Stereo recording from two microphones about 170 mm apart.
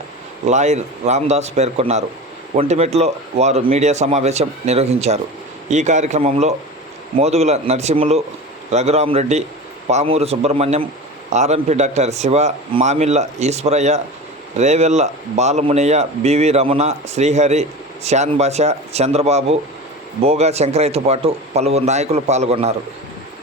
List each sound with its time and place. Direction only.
0.4 s a man's voice: 45° right (ahead or behind)